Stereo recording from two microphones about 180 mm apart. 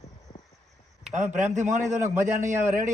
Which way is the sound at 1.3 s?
45° right (ahead or behind).